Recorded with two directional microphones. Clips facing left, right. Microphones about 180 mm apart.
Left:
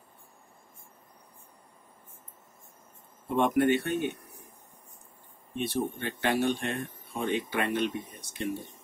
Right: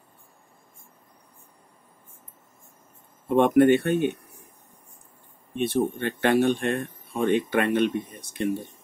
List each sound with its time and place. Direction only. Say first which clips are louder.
3.3 s speech: right 7 dB; 60° right (ahead or behind)
5.6 s speech: right 6 dB; 60° right (ahead or behind)